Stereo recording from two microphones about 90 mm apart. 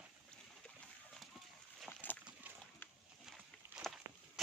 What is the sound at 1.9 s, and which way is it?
Boat, 20° left (ahead or behind).